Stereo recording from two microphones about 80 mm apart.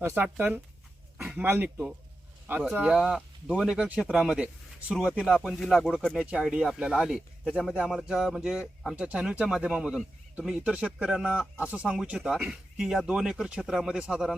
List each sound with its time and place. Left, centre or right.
0.0 s speech: right
2.9 s speech: centre
6.1 s speech: centre
10.3 s speech: centre